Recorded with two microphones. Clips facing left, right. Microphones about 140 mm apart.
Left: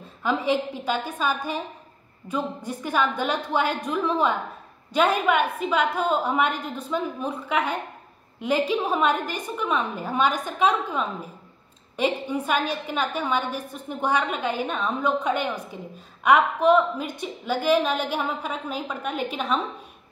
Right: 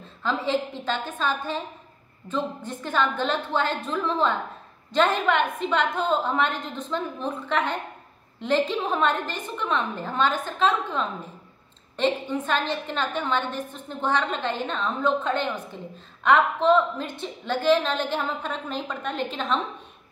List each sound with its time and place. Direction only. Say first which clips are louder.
0.0 s a woman's voice: left 2 dB; 10° left (ahead or behind)